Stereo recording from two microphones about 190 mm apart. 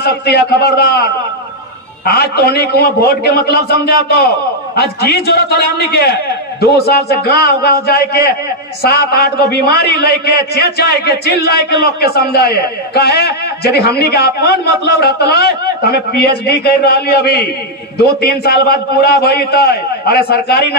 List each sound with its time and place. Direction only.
0.0 s a man's voice: 60° left (ahead or behind)